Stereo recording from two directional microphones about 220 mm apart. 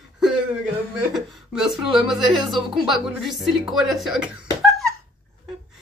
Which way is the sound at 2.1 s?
Centre (ahead or behind).